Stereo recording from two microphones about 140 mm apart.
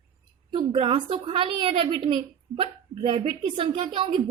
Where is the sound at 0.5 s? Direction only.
40° right (ahead or behind).